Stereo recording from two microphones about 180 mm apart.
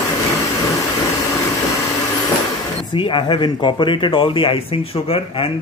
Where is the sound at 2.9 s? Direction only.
25° left (ahead or behind).